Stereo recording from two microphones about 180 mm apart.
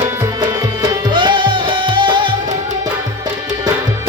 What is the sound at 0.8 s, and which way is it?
Music, 25° right (ahead or behind).